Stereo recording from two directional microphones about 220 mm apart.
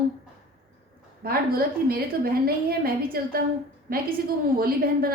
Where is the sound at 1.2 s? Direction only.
45° right (ahead or behind).